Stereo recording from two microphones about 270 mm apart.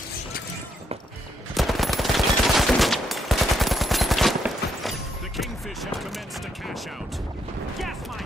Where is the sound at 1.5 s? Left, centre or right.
Centre.